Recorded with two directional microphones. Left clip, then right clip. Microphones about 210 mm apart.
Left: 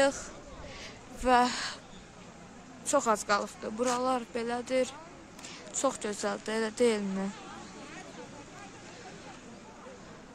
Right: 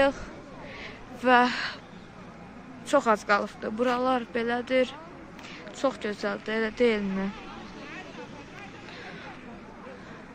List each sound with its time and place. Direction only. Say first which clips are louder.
1.2 s speech: right 4 dB; 10° left (ahead or behind)
2.9 s speech: right 4 dB; 5° left (ahead or behind)
5.8 s speech: right 3 dB; 20° left (ahead or behind)